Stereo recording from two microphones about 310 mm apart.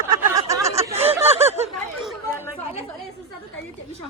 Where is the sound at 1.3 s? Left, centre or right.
Centre.